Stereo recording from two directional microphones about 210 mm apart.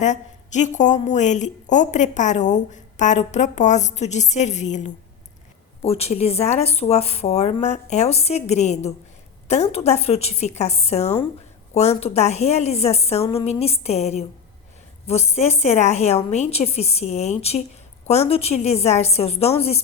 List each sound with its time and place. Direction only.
0.0 s a woman's voice: 35° left (ahead or behind)